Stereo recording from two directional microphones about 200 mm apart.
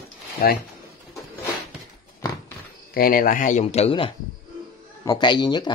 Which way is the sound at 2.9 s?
45° left (ahead or behind).